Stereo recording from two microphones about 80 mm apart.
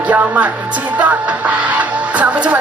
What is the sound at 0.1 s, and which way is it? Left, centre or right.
Music, right.